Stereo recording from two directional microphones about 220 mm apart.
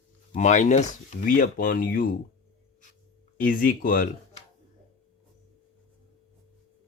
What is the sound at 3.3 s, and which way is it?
Speech, 40° left (ahead or behind).